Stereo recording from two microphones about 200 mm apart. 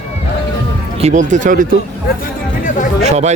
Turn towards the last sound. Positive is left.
turn(degrees=-35)  # may be behind; listen again after turning